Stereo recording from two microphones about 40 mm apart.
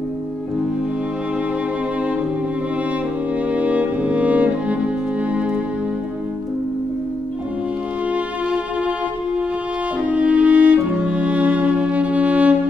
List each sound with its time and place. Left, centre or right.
3.4 s music: right
10.0 s music: right